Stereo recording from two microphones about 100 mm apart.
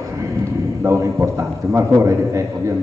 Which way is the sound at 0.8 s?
30° right (ahead or behind).